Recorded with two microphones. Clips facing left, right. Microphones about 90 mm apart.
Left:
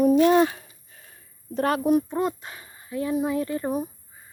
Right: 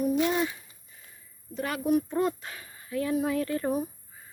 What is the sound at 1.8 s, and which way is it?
Speech, 25° left (ahead or behind).